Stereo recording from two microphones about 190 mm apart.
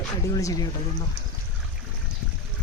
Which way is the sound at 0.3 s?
20° left (ahead or behind).